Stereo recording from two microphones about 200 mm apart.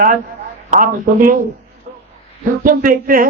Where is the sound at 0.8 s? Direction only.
45° right (ahead or behind).